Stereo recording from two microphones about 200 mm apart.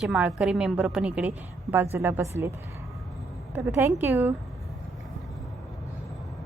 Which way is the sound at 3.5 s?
10° right (ahead or behind).